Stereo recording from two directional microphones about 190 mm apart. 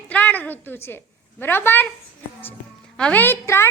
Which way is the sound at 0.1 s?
10° left (ahead or behind).